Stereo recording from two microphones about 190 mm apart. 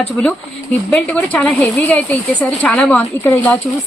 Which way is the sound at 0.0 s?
5° left (ahead or behind).